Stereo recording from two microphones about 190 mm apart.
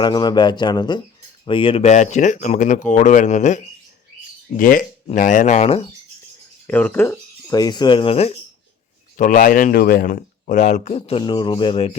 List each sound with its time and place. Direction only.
0.0 s speech: 20° left (ahead or behind)
6.7 s speech: 10° left (ahead or behind); by 8.4 s 30° left (ahead or behind)
9.1 s speech: 45° left (ahead or behind); by 11.9 s 25° left (ahead or behind)